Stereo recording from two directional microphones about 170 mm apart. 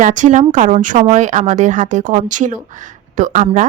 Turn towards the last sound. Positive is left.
turn(degrees=-45)  # may be behind; listen again after turning